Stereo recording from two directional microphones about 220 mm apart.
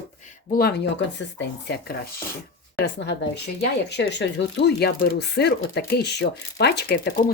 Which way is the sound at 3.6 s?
50° left (ahead or behind).